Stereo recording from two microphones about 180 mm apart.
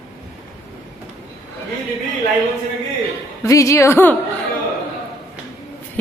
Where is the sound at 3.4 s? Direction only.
15° left (ahead or behind).